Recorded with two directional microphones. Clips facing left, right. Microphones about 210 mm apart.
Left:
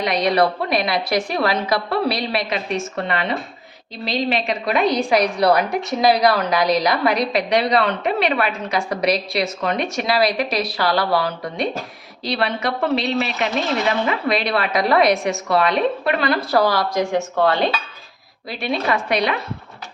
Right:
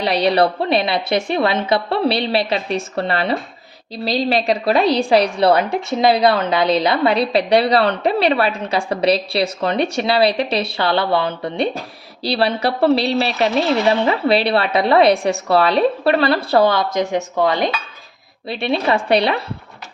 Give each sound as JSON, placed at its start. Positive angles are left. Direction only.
{"t": 0.0, "sound": "a woman's voice", "side_deg": -30}
{"t": 18.4, "sound": "a woman's voice", "side_deg": -25}